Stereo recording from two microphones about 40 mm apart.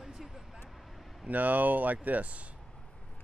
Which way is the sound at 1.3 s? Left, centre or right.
Right.